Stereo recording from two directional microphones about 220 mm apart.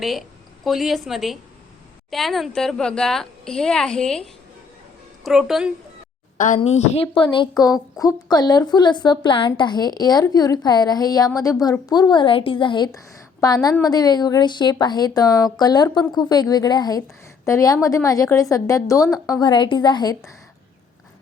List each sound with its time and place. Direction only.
0.0 s a woman's voice: centre (ahead or behind)
6.3 s a woman's voice: 35° left (ahead or behind); by 20.3 s 20° left (ahead or behind)